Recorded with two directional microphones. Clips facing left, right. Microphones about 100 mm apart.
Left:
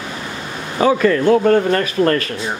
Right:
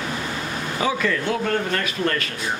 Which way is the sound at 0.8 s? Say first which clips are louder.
Left 10 dB; 45° left (ahead or behind).